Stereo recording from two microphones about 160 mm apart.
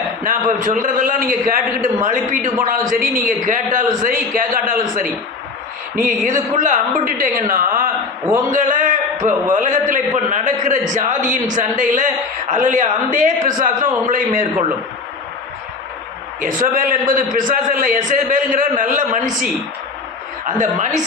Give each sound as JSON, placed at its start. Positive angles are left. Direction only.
{"t": 0.3, "sound": "a woman's voice", "side_deg": -55}
{"t": 16.4, "sound": "speech", "side_deg": -55}
{"t": 20.6, "sound": "a woman's voice", "side_deg": -50}